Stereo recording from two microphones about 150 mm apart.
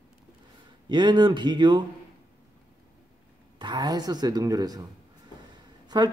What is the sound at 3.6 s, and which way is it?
Speech, 30° right (ahead or behind).